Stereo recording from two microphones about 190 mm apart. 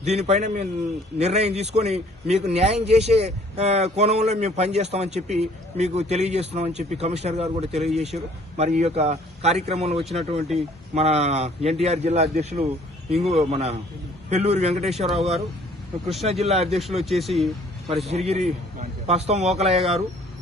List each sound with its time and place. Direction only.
0.0 s a man's voice: 35° right (ahead or behind)
17.0 s speech: centre (ahead or behind)
18.3 s a man's voice: 35° right (ahead or behind)